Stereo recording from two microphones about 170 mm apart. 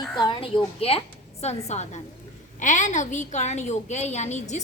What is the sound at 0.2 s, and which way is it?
A woman's voice, 30° left (ahead or behind).